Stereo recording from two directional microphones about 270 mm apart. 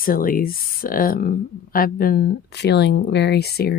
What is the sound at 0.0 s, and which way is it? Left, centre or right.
Speech, left.